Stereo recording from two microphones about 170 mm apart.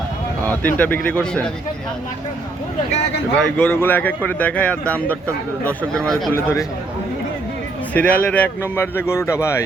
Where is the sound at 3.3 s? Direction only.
5° left (ahead or behind).